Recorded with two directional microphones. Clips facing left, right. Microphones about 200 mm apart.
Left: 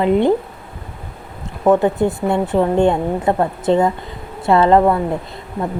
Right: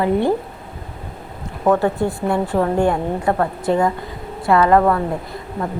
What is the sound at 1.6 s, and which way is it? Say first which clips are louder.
A woman's voice: left 3 dB; 20° left (ahead or behind).